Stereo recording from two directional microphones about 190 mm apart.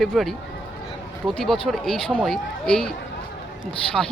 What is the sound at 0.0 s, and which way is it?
Speech, centre (ahead or behind).